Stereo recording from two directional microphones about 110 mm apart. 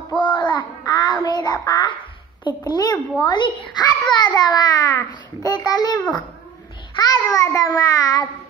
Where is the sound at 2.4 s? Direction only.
35° left (ahead or behind).